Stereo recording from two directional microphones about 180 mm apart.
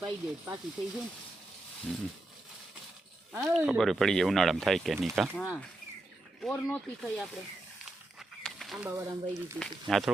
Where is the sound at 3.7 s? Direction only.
Centre (ahead or behind).